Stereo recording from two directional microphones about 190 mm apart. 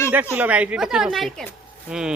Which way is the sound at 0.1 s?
10° right (ahead or behind).